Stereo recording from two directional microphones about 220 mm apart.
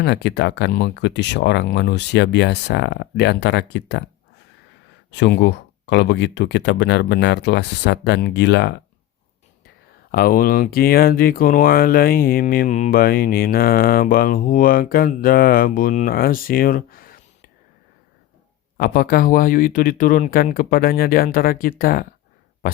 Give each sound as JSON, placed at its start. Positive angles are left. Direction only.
{"t": 0.0, "sound": "speech", "side_deg": 50}
{"t": 5.1, "sound": "speech", "side_deg": 50}
{"t": 10.1, "sound": "speech", "side_deg": 40}
{"t": 18.8, "sound": "speech", "side_deg": 40}